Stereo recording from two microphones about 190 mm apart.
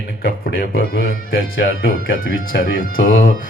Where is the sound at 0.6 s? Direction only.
55° left (ahead or behind).